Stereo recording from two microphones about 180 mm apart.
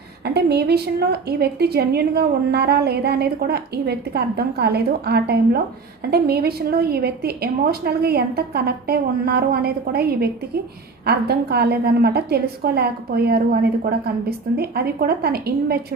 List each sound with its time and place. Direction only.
0.3 s a woman's voice: 65° right (ahead or behind)